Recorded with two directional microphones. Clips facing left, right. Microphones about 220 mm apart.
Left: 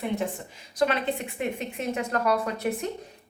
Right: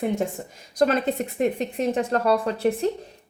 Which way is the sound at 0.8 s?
40° right (ahead or behind).